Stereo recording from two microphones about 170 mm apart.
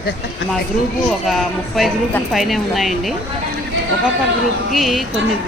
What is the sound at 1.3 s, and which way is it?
Speech, centre (ahead or behind).